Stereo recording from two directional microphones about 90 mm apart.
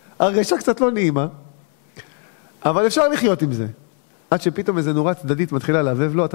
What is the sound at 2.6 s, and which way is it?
A man's voice, 15° left (ahead or behind).